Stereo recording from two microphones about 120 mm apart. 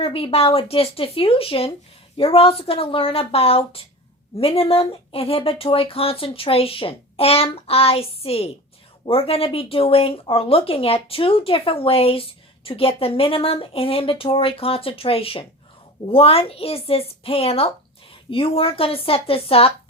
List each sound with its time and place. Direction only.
0.0 s speech: 50° left (ahead or behind)